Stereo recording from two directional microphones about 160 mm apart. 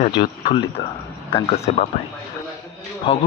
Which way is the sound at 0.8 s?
30° left (ahead or behind).